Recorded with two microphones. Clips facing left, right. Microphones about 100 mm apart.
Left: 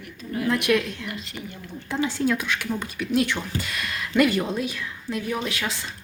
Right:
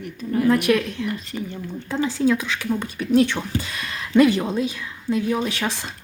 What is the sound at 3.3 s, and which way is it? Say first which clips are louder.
A woman's voice: right 2 dB; 25° right (ahead or behind).